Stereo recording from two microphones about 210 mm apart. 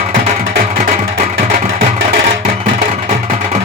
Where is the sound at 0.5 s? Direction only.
40° right (ahead or behind).